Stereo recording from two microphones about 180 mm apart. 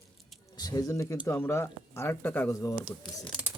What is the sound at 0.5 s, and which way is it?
Speech, 20° left (ahead or behind).